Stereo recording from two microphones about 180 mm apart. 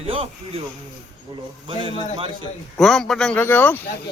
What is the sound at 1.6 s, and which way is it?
Speech, 30° right (ahead or behind).